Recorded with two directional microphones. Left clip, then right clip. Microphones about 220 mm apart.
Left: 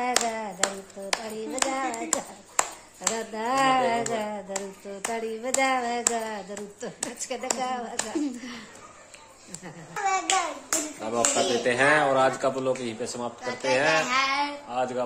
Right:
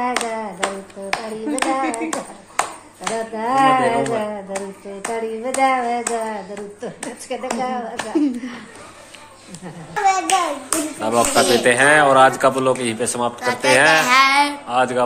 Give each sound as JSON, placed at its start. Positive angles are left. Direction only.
{"t": 0.0, "sound": "hands", "side_deg": 55}
{"t": 1.1, "sound": "clapping", "side_deg": 55}
{"t": 10.0, "sound": "hands", "side_deg": -45}
{"t": 11.1, "sound": "speech", "side_deg": 5}